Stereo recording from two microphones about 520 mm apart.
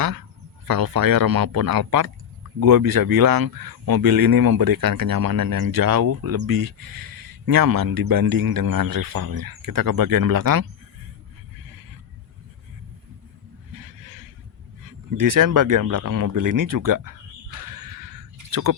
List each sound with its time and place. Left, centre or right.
0.0 s speech: right
13.7 s a sound: right
15.2 s speech: right